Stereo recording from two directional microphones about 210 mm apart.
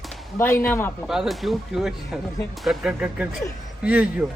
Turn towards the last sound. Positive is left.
turn(degrees=-5)  # may be behind; listen again after turning